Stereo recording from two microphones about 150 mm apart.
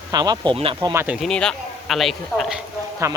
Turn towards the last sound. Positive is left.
turn(degrees=-20)  # may be behind; listen again after turning